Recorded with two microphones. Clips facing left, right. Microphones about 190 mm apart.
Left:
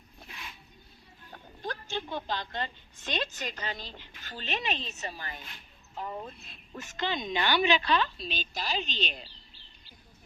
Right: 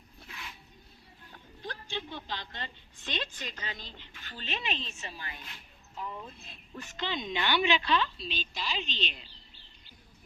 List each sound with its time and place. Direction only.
1.3 s a woman's voice: 45° left (ahead or behind)